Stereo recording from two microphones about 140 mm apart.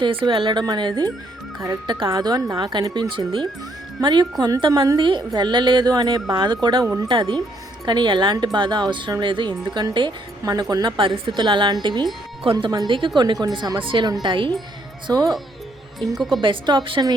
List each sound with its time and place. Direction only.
0.0 s speech: 35° right (ahead or behind)
16.1 s speech: centre (ahead or behind)
16.4 s speech: 35° right (ahead or behind)